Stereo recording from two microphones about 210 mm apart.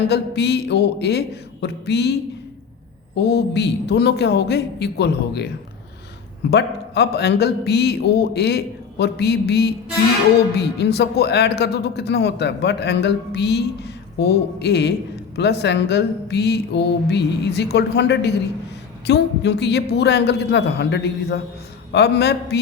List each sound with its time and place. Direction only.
0.1 s speech: 55° left (ahead or behind)
3.2 s speech: 55° left (ahead or behind)
6.5 s speech: 50° left (ahead or behind)